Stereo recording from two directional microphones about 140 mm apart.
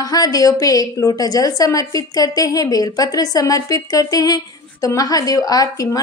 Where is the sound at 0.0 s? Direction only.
25° left (ahead or behind).